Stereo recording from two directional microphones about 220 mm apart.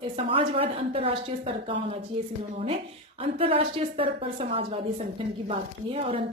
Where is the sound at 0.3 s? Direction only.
25° right (ahead or behind).